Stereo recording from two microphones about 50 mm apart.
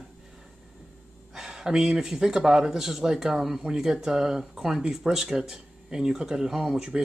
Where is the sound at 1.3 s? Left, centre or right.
Centre.